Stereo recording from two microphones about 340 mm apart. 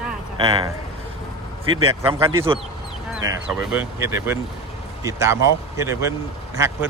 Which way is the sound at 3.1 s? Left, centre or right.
Centre.